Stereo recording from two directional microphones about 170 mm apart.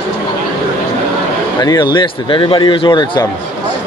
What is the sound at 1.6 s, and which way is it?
Speech, 25° left (ahead or behind).